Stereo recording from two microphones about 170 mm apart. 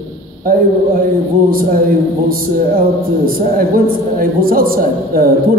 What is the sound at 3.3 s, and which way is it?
A man's voice, 60° right (ahead or behind).